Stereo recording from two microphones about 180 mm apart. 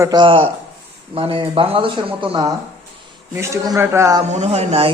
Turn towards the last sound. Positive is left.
turn(degrees=-35)  # may be behind; listen again after turning